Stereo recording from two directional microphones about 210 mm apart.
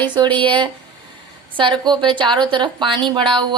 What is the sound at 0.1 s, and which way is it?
A woman's voice, 20° right (ahead or behind).